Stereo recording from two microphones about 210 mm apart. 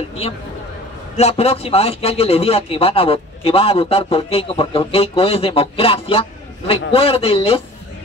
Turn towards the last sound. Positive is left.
turn(degrees=25)  # may be behind; listen again after turning